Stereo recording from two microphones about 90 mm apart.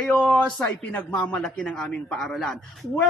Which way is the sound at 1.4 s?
5° left (ahead or behind).